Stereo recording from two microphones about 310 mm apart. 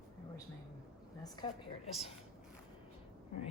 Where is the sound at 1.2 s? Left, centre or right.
Centre.